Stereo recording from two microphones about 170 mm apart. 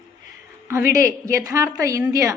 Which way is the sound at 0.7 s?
15° right (ahead or behind).